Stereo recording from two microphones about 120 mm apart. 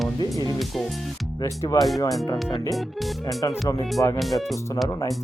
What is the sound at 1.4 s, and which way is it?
Speech, 25° left (ahead or behind).